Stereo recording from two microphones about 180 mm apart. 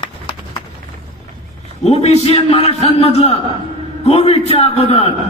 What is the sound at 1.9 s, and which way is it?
A man's voice, 35° left (ahead or behind).